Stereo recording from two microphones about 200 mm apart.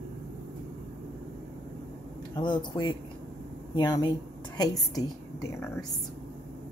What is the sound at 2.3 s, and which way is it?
A woman's voice, 20° left (ahead or behind).